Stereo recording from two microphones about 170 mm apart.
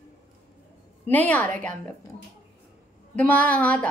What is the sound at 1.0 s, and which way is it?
Speech, 10° left (ahead or behind).